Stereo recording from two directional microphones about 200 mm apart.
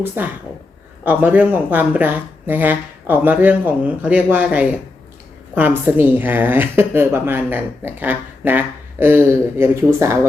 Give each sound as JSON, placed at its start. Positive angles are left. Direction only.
{"t": 0.2, "sound": "a woman's voice", "side_deg": -10}